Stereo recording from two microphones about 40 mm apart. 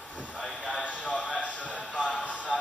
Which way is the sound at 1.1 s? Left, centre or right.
Left.